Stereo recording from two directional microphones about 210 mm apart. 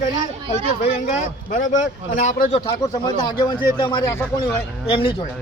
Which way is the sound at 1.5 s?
35° left (ahead or behind).